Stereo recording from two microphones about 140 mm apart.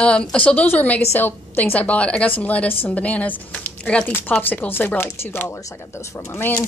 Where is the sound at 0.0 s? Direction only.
5° left (ahead or behind).